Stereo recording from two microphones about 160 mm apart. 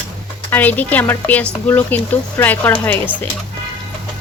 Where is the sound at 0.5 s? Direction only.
10° left (ahead or behind).